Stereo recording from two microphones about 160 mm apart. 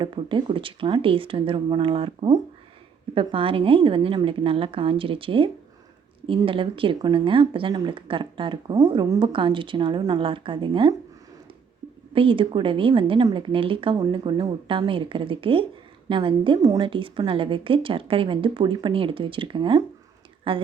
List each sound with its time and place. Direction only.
0.0 s speech: 30° right (ahead or behind)
12.1 s speech: 35° right (ahead or behind)